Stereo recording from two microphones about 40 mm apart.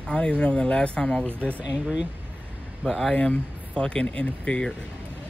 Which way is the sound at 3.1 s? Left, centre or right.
Left.